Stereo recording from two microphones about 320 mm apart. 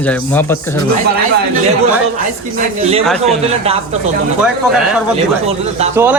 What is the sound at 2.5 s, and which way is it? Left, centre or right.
Speech, right.